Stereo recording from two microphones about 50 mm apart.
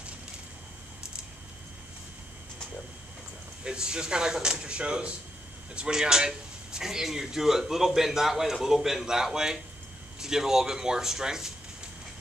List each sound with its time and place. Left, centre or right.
3.6 s speech: centre